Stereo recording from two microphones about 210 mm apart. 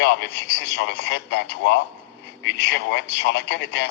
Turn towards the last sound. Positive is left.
turn(degrees=55)  # may be behind; listen again after turning